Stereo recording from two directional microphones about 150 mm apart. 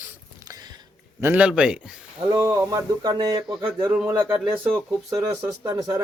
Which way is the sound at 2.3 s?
25° right (ahead or behind).